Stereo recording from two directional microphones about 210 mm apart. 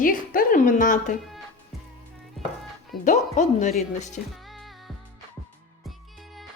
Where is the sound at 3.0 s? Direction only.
35° left (ahead or behind).